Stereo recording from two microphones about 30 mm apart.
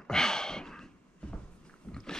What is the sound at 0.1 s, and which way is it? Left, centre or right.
Sigh, left.